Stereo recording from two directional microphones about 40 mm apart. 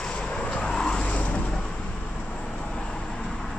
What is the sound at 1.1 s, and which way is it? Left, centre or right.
Vehicle, left.